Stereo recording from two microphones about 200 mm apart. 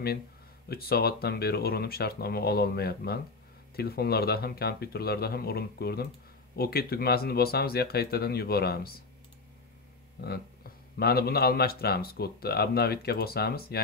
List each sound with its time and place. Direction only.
0.7 s speech: 50° left (ahead or behind)
11.0 s speech: 50° left (ahead or behind)